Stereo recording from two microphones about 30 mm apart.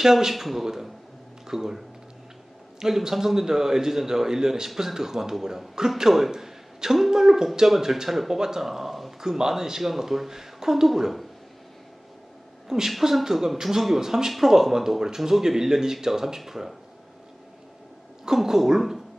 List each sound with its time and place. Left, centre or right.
0.0 s speech: centre
3.0 s speech: centre
6.3 s a sound: centre
7.1 s speech: centre
8.4 s speech: centre
8.6 s speech: centre
9.4 s speech: centre
12.6 s a woman's voice: centre
12.9 s speech: centre
18.4 s speech: centre